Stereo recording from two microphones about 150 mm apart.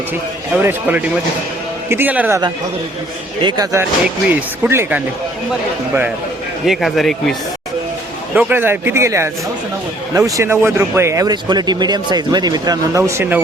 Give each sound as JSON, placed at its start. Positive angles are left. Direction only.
{"t": 0.5, "sound": "speech", "side_deg": -15}
{"t": 3.4, "sound": "speech", "side_deg": -20}
{"t": 4.3, "sound": "speech", "side_deg": -10}
{"t": 6.7, "sound": "speech", "side_deg": 0}
{"t": 8.4, "sound": "speech", "side_deg": -10}